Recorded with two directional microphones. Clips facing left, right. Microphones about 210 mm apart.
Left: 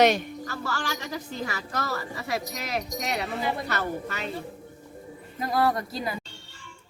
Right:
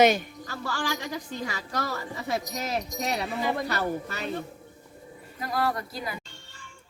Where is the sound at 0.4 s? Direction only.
15° right (ahead or behind).